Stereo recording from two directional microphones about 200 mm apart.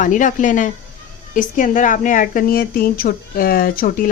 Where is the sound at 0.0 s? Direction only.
40° left (ahead or behind).